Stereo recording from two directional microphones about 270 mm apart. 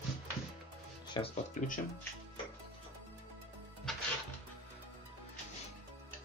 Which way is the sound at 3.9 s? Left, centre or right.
Centre.